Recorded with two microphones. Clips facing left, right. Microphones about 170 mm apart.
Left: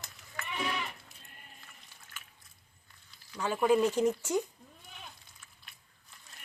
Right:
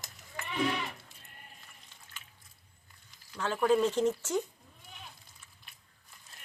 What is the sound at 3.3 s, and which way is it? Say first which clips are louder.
Speech: even; 10° left (ahead or behind).